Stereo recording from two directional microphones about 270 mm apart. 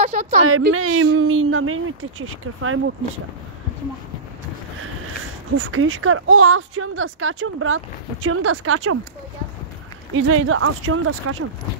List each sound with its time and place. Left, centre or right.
0.0 s a sound: right
0.5 s speech: right
5.6 s speech: right
10.1 s speech: right